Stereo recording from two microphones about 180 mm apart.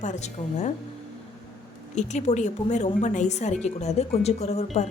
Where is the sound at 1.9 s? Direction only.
40° left (ahead or behind).